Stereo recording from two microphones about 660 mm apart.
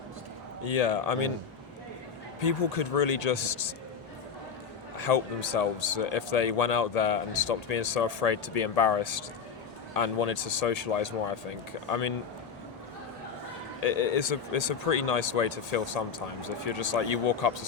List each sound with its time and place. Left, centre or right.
0.6 s speech: left
2.4 s speech: left
4.9 s speech: left
13.8 s speech: left